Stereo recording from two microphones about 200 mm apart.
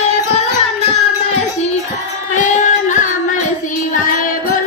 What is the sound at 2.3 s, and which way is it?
Music, 40° left (ahead or behind).